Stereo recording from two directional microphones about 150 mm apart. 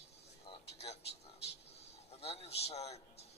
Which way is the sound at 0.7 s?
45° left (ahead or behind).